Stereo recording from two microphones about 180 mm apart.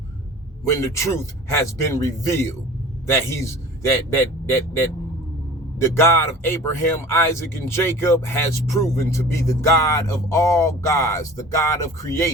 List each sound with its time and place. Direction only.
0.7 s speech: 15° left (ahead or behind)